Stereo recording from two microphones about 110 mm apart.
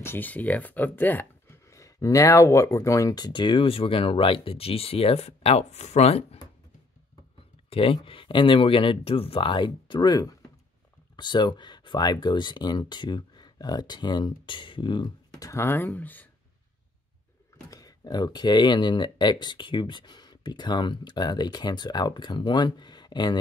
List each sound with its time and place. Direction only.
0.0 s speech: 20° left (ahead or behind)
1.7 s speech: 30° left (ahead or behind); by 6.2 s 80° left
7.7 s speech: 60° left (ahead or behind); by 15.6 s 35° left (ahead or behind)
15.6 s speech: 20° left (ahead or behind)
17.6 s speech: 35° left (ahead or behind)